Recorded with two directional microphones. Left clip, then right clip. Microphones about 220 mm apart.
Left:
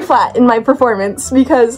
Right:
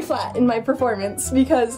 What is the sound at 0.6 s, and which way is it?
A woman's voice, 55° left (ahead or behind).